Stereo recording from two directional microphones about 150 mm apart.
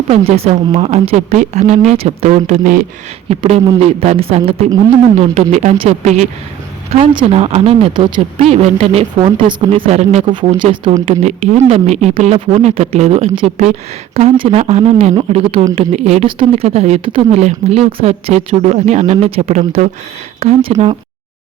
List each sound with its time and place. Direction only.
0.1 s speech: 40° right (ahead or behind)
3.2 s speech: 45° right (ahead or behind)
7.0 s speech: 35° right (ahead or behind)
7.9 s speech: 30° right (ahead or behind); by 10.2 s 50° right (ahead or behind)
10.6 s speech: 35° right (ahead or behind)
11.0 s speech: 50° right (ahead or behind)